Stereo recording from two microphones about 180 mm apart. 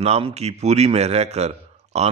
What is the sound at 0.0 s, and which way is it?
A man's voice, 35° right (ahead or behind).